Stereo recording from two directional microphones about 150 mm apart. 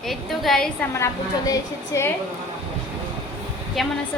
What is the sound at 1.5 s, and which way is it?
Speech, 20° left (ahead or behind).